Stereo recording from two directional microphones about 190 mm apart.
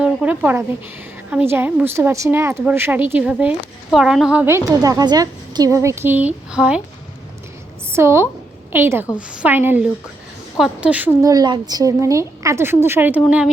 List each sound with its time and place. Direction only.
0.0 s a sound: 5° right (ahead or behind)
1.3 s a woman's voice: 10° right (ahead or behind)
7.9 s a woman's voice: 15° right (ahead or behind)